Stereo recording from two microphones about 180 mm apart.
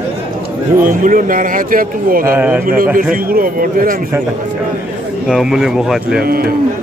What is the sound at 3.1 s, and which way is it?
Speech, 55° right (ahead or behind).